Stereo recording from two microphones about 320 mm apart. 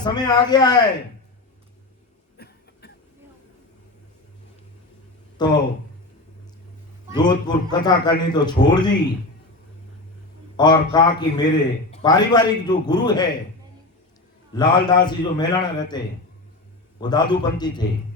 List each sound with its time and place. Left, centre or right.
0.0 s a man's voice: centre
2.4 s cough: left
5.4 s a man's voice: centre
7.1 s a man's voice: centre
10.6 s a man's voice: centre
14.5 s a man's voice: centre